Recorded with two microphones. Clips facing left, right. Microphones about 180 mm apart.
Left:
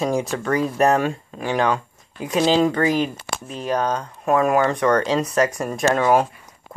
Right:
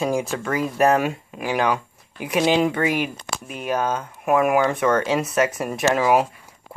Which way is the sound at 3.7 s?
5° right (ahead or behind).